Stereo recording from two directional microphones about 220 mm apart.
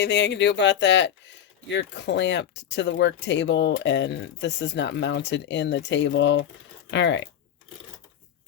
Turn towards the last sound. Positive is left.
turn(degrees=55)  # may be behind; listen again after turning